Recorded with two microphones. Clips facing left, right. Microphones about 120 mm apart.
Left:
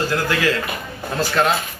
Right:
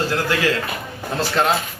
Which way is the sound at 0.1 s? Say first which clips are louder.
Even; 30° right (ahead or behind).